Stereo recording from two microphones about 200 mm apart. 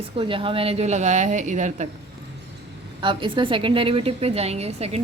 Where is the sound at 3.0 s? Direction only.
25° right (ahead or behind).